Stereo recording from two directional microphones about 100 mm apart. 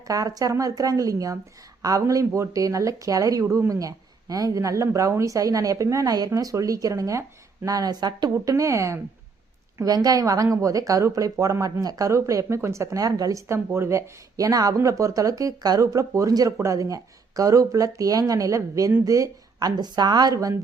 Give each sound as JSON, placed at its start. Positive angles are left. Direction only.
{"t": 0.1, "sound": "speech", "side_deg": -35}